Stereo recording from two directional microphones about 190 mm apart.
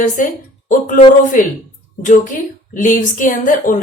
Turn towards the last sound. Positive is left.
turn(degrees=45)  # may be behind; listen again after turning